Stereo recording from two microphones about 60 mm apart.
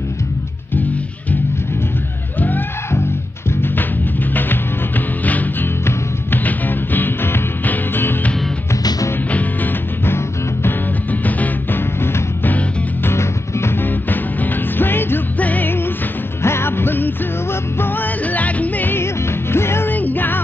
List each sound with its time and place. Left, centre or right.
4.3 s music: left
9.3 s music: left
10.0 s music: left
11.1 s music: left
13.0 s music: left
13.8 s music: left
15.3 s music: left
19.5 s music: left
19.9 s music: left